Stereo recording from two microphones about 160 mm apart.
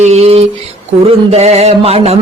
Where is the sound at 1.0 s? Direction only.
40° right (ahead or behind).